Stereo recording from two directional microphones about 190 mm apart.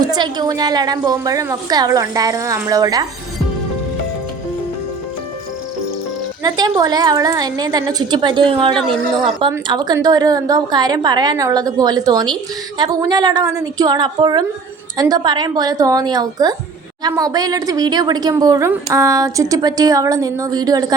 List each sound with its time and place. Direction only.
0.0 s a woman's voice: 20° right (ahead or behind)
6.4 s a woman's voice: 20° right (ahead or behind)